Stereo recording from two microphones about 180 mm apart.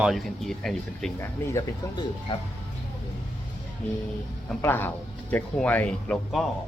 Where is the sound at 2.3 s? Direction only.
30° left (ahead or behind).